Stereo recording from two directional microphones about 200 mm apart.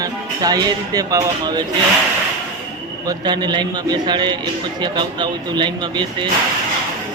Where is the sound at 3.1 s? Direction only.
20° right (ahead or behind).